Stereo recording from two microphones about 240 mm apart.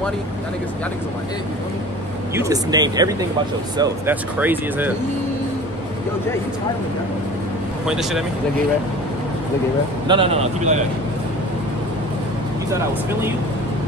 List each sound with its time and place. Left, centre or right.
2.3 s speech: centre
7.8 s speech: centre
10.0 s speech: right